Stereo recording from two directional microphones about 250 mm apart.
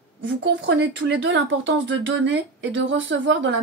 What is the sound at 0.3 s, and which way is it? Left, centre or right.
Speech, right.